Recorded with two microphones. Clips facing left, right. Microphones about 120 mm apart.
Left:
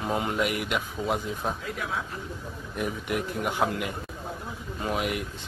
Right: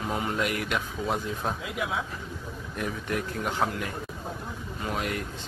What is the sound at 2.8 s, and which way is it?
Speech, 10° left (ahead or behind).